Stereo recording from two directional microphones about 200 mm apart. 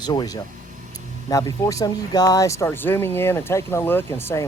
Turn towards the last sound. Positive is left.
turn(degrees=15)  # may be behind; listen again after turning